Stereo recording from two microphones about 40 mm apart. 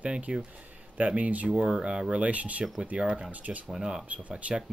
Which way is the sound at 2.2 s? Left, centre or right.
Right.